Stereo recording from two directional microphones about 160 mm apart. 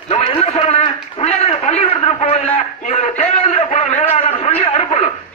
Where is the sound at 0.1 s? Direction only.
35° left (ahead or behind).